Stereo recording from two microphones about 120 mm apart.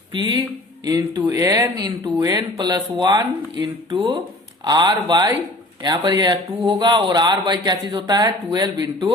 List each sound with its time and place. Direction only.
0.1 s speech: 40° right (ahead or behind)
0.9 s speech: 30° right (ahead or behind)
3.9 s speech: 45° right (ahead or behind)
4.6 s speech: 35° right (ahead or behind)